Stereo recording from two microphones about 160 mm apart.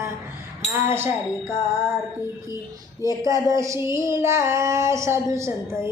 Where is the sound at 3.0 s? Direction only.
20° right (ahead or behind).